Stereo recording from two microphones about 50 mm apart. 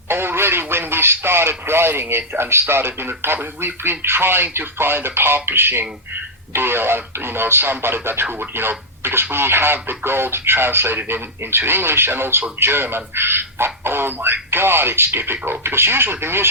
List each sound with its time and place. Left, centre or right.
0.1 s speech: right